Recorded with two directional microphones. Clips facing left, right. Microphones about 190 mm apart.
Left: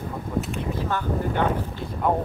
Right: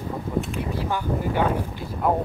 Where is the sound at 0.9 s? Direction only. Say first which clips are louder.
Even; 10° right (ahead or behind).